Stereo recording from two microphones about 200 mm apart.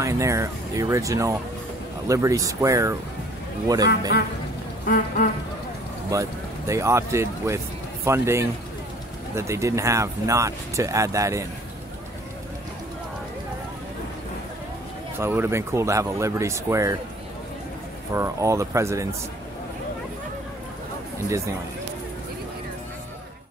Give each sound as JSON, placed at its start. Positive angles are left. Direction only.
{"t": 0.0, "sound": "a man's voice", "side_deg": -15}
{"t": 6.1, "sound": "speech", "side_deg": -15}
{"t": 15.1, "sound": "speech", "side_deg": -10}
{"t": 18.1, "sound": "speech", "side_deg": -15}